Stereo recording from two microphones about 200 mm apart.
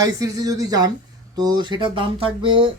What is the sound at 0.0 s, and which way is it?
Speech, 15° right (ahead or behind).